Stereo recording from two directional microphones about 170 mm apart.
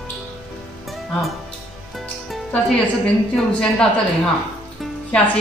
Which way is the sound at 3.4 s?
5° left (ahead or behind).